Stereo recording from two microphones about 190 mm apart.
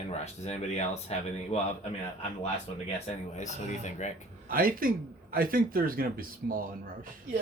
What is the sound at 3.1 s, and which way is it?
Speech, 40° left (ahead or behind).